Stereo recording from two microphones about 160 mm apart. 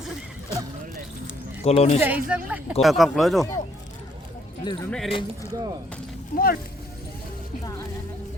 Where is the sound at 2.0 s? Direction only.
10° right (ahead or behind).